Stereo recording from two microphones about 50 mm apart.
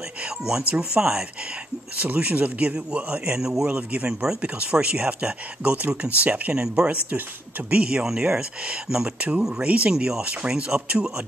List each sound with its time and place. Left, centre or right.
0.4 s speech: centre
0.7 s speech: right
2.0 s speech: right
3.3 s speech: centre
3.6 s speech: right
4.1 s speech: centre; by 6.5 s right
6.5 s speech: centre
9.2 s speech: right